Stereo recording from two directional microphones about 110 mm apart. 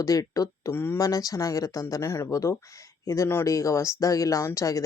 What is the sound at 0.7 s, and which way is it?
Speech, 20° left (ahead or behind).